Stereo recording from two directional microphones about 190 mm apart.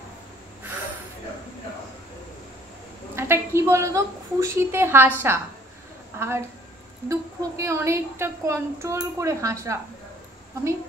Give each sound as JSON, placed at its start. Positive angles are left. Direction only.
{"t": 3.2, "sound": "a woman's voice", "side_deg": -15}